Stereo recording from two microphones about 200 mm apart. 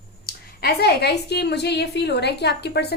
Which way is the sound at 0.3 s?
50° left (ahead or behind).